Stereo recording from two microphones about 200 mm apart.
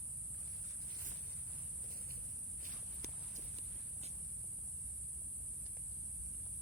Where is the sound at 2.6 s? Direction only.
45° right (ahead or behind).